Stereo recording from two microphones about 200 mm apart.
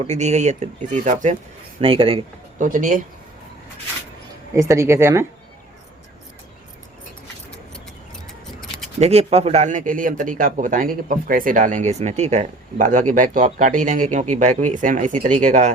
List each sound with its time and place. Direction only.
0.0 s speech: 35° right (ahead or behind)
2.6 s speech: 40° right (ahead or behind)
4.5 s speech: 15° right (ahead or behind)
9.0 s speech: 30° right (ahead or behind)